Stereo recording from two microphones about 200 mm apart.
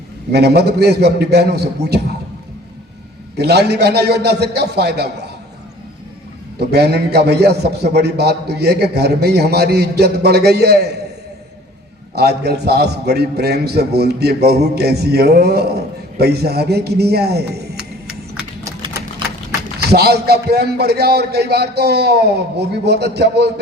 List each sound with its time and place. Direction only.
0.3 s a man's voice: 55° right (ahead or behind)
3.3 s a man's voice: 55° right (ahead or behind)
6.6 s a man's voice: 55° right (ahead or behind)
12.1 s a man's voice: 55° right (ahead or behind)
18.6 s typing: 15° right (ahead or behind)
19.8 s a man's voice: 55° right (ahead or behind)